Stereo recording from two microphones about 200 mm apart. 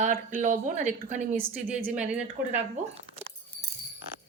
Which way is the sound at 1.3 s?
10° right (ahead or behind).